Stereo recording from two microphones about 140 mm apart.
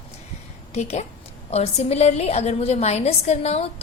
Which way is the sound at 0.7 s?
50° left (ahead or behind).